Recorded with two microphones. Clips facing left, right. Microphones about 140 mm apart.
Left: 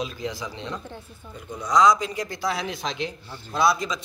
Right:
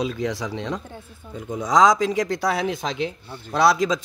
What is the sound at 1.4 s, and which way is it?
Speech, 90° right.